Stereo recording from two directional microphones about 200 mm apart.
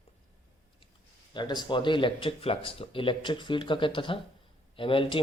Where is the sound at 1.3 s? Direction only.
20° left (ahead or behind).